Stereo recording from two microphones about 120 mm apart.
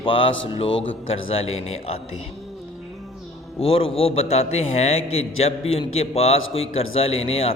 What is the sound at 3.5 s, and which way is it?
A man's voice, 50° left (ahead or behind).